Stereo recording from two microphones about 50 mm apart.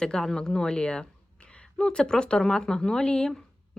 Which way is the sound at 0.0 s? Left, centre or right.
Centre.